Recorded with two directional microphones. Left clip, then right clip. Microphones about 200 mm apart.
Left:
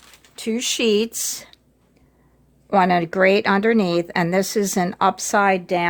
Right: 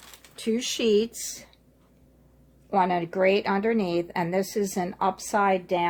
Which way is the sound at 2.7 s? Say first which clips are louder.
Left 7 dB; 50° left (ahead or behind).